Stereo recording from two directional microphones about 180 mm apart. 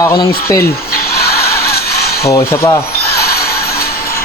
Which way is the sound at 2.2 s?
15° left (ahead or behind).